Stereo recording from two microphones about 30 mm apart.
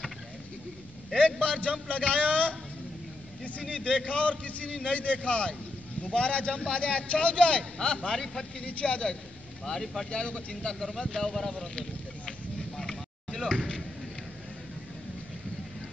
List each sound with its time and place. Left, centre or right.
1.1 s a man's voice: left
3.6 s a man's voice: left
8.1 s speech: centre
8.6 s speech: left
9.7 s speech: centre
10.1 s speech: left; by 11.5 s centre